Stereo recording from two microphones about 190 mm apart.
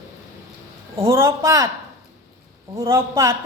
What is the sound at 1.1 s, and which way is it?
Speech, 15° right (ahead or behind).